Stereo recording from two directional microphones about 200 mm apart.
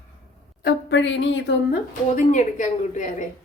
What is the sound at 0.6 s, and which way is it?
A woman's voice, 60° left (ahead or behind).